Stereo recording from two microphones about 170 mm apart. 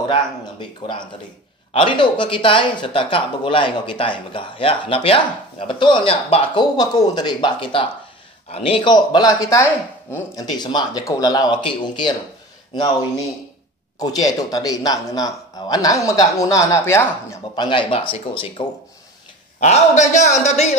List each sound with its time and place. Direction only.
0.1 s speech: 30° left (ahead or behind)
13.9 s speech: 20° left (ahead or behind)
17.6 s speech: 30° left (ahead or behind)
19.6 s a man's voice: 45° left (ahead or behind)